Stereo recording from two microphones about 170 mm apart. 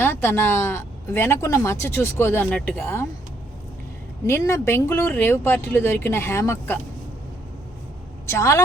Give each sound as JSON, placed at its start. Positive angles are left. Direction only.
{"t": 0.0, "sound": "speech", "side_deg": 15}
{"t": 4.3, "sound": "speech", "side_deg": 15}
{"t": 8.3, "sound": "speech", "side_deg": 20}